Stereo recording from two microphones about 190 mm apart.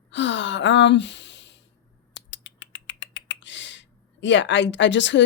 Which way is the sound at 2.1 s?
75° left (ahead or behind).